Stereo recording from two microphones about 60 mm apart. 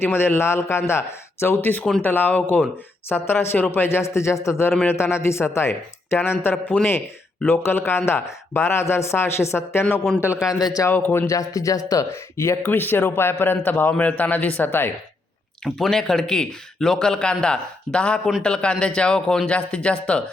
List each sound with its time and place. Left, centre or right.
0.0 s speech: left
10.5 s speech: left
10.9 s speech: left
11.3 s speech: left
12.4 s speech: left
12.7 s speech: left
15.6 s a man's voice: centre